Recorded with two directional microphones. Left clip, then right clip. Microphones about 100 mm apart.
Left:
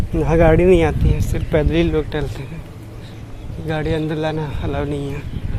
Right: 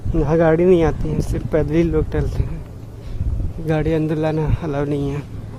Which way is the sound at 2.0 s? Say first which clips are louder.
Even; 55° right (ahead or behind).